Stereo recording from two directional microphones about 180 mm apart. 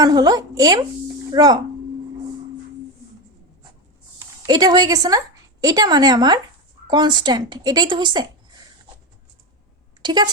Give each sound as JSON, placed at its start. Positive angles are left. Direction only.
{"t": 0.0, "sound": "a woman's voice", "side_deg": -20}
{"t": 4.4, "sound": "a woman's voice", "side_deg": -20}
{"t": 10.0, "sound": "a woman's voice", "side_deg": -25}